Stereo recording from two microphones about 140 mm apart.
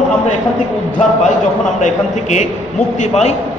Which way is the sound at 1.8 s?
55° left (ahead or behind).